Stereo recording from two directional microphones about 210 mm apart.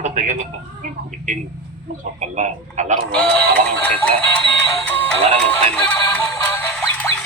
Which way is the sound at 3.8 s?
5° left (ahead or behind).